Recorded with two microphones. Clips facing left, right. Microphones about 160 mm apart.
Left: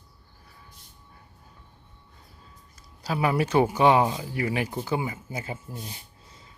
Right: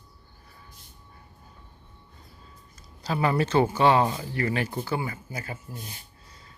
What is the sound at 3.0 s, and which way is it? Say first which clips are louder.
Speech: even; 10° left (ahead or behind).